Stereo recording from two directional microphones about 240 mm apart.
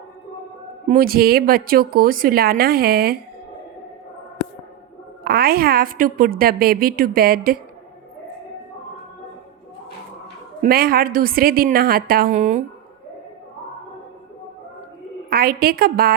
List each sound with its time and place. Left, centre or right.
0.9 s a woman's voice: right
5.2 s a woman's voice: right
10.6 s a woman's voice: right
15.3 s a woman's voice: right